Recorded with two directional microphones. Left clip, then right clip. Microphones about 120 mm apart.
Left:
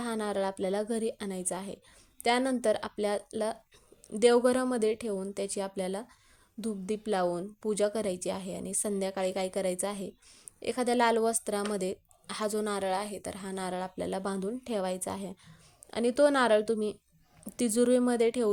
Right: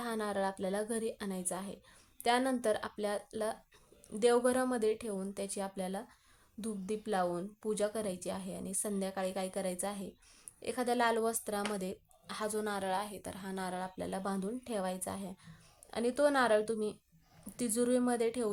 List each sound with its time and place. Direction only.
0.0 s speech: 35° left (ahead or behind)